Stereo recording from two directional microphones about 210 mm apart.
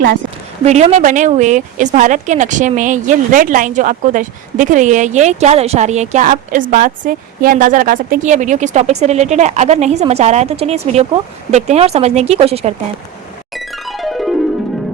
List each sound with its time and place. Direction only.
0.6 s speech: 30° right (ahead or behind)
13.5 s music: centre (ahead or behind)